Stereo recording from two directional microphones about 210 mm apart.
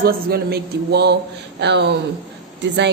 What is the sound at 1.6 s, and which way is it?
Speech, 55° right (ahead or behind).